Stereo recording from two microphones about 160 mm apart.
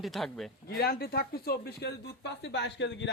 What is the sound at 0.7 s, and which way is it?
Speech, 70° left (ahead or behind).